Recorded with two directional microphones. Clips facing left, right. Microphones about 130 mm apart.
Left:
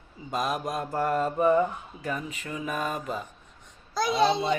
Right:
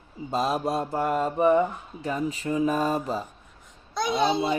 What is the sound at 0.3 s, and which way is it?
Speech, 30° right (ahead or behind).